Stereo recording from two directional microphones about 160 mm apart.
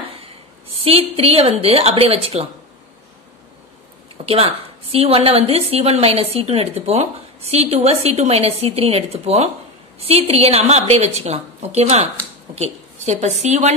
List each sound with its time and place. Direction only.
0.7 s a woman's voice: 35° right (ahead or behind)
4.3 s a woman's voice: 35° right (ahead or behind)